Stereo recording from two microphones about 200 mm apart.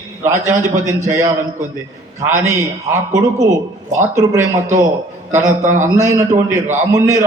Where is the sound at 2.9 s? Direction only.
15° right (ahead or behind).